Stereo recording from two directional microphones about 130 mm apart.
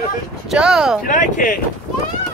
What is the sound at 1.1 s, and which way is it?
Speech, 90° left.